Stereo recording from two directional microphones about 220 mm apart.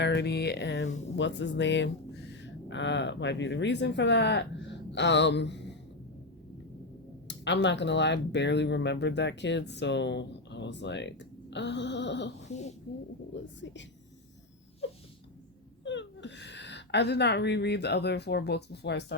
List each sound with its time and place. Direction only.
0.0 s speech: 50° left (ahead or behind)
7.3 s speech: 55° left (ahead or behind)
15.8 s speech: 55° left (ahead or behind)